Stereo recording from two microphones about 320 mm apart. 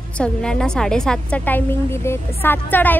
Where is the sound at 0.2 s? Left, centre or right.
Centre.